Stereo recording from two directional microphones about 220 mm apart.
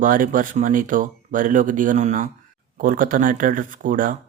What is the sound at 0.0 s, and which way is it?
Speech, 40° right (ahead or behind).